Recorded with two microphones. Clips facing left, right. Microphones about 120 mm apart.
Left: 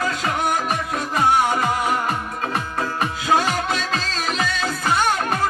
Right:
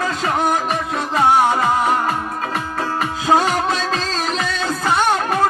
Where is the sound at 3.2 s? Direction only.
30° right (ahead or behind).